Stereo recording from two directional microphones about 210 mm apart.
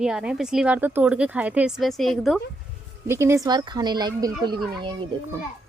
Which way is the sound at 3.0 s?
10° right (ahead or behind).